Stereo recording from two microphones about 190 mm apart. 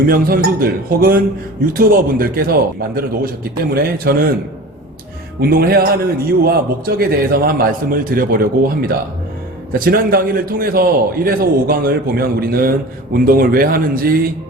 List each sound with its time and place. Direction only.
0.1 s a man's voice: 50° right (ahead or behind)
5.4 s a man's voice: 55° right (ahead or behind)
9.7 s a man's voice: 50° right (ahead or behind)